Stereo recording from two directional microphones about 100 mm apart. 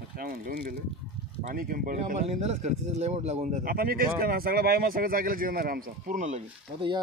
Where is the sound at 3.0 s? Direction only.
90° right.